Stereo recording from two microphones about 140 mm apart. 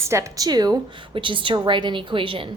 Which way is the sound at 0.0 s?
20° right (ahead or behind).